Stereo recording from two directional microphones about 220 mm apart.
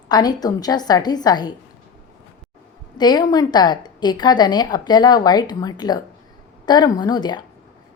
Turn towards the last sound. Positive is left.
turn(degrees=20)  # may be behind; listen again after turning